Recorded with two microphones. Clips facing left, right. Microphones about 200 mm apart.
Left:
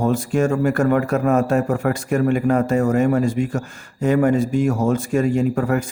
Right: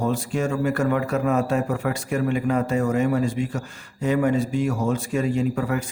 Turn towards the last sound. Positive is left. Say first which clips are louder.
# left 4 dB
turn(degrees=50)  # may be behind; listen again after turning